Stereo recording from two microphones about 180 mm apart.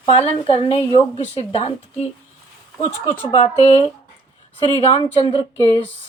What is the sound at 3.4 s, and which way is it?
A woman's voice, 35° left (ahead or behind).